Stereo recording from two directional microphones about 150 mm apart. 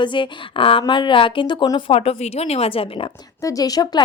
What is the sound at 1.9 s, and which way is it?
A woman's voice, 40° left (ahead or behind).